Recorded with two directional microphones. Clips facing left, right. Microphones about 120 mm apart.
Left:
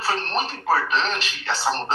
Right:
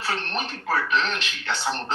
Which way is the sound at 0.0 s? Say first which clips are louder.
Left 4 dB; 35° left (ahead or behind).